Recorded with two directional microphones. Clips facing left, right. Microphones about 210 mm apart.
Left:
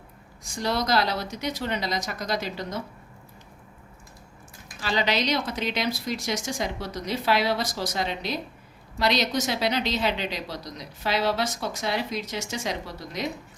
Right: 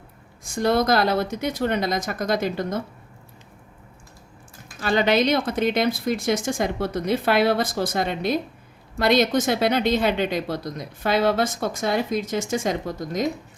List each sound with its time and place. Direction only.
0.4 s a woman's voice: 50° right (ahead or behind)
4.8 s a woman's voice: 50° right (ahead or behind)